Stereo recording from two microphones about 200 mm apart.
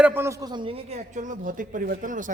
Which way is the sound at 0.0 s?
10° right (ahead or behind).